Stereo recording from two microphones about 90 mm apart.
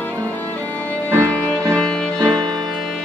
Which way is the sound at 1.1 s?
30° right (ahead or behind).